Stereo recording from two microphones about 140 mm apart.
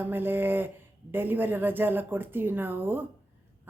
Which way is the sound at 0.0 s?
15° right (ahead or behind).